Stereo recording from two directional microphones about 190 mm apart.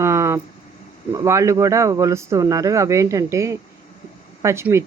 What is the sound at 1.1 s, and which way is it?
Speech, 15° right (ahead or behind).